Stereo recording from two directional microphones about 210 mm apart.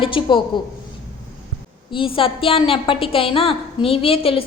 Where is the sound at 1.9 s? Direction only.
25° left (ahead or behind).